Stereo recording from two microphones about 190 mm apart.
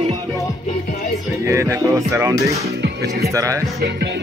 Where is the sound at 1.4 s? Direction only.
15° right (ahead or behind).